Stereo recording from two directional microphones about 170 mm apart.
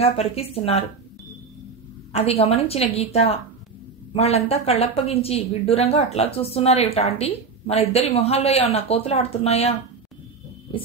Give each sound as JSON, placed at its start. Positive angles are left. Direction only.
{"t": 0.0, "sound": "a woman's voice", "side_deg": 35}
{"t": 2.1, "sound": "a woman's voice", "side_deg": 35}